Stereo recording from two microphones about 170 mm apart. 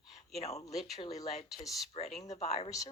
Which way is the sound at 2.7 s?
20° left (ahead or behind).